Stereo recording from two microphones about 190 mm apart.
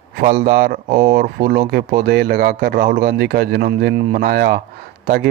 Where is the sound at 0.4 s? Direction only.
50° right (ahead or behind).